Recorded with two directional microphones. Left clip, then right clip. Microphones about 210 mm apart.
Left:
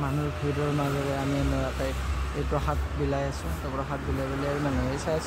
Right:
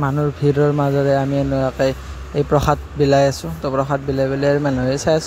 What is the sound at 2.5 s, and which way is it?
Speech, 40° right (ahead or behind).